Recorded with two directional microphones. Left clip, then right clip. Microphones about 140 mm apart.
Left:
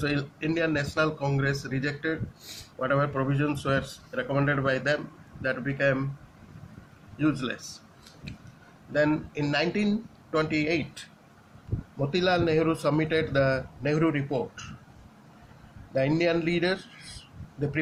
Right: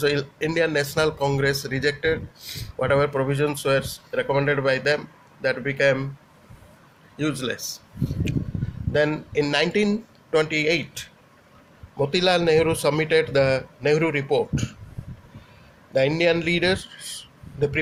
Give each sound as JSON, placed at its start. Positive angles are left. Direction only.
{"t": 0.0, "sound": "speech", "side_deg": -60}
{"t": 7.2, "sound": "speech", "side_deg": -50}
{"t": 8.9, "sound": "speech", "side_deg": -45}
{"t": 12.1, "sound": "speech", "side_deg": -40}
{"t": 16.0, "sound": "speech", "side_deg": -35}